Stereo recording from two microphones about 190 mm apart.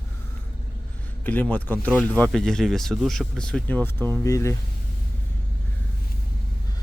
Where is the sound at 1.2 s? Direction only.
10° left (ahead or behind).